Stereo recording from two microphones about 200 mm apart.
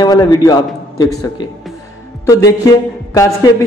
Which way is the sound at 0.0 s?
15° left (ahead or behind).